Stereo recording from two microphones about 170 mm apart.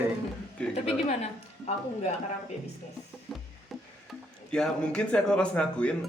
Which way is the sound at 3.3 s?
Centre (ahead or behind).